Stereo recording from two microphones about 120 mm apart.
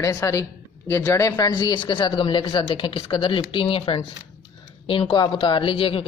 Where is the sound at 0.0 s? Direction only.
25° left (ahead or behind).